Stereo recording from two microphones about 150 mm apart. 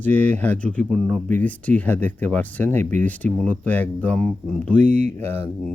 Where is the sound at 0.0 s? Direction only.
10° left (ahead or behind).